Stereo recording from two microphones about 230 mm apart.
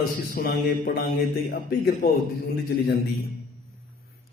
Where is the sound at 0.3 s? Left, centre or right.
Left.